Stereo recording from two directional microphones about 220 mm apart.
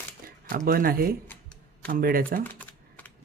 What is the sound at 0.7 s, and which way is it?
Speech, 40° right (ahead or behind).